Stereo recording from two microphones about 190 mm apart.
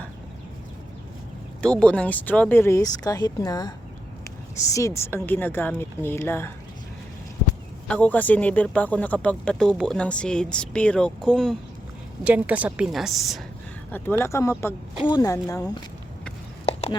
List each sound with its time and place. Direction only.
1.6 s speech: 5° left (ahead or behind)
7.9 s a woman's voice: 5° left (ahead or behind)
13.9 s speech: 10° left (ahead or behind)